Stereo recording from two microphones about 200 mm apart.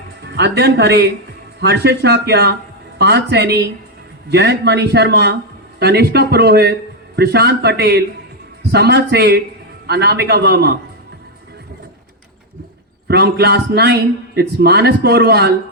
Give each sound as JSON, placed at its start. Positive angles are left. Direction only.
{"t": 0.2, "sound": "a man's voice", "side_deg": -55}
{"t": 13.1, "sound": "a man's voice", "side_deg": -55}